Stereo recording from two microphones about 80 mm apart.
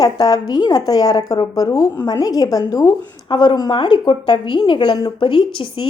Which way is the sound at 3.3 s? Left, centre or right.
Left.